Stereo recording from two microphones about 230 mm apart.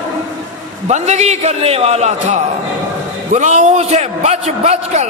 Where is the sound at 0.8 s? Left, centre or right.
Right.